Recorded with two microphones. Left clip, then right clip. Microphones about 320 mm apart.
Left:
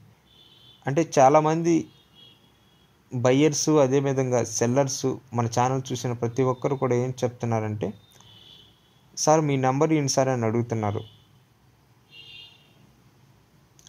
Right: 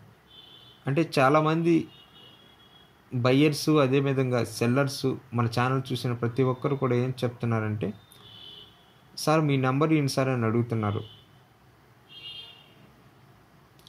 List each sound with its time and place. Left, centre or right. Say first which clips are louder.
0.8 s speech: left 5 dB; left
3.2 s speech: left 3 dB; left
9.2 s speech: left 4 dB; left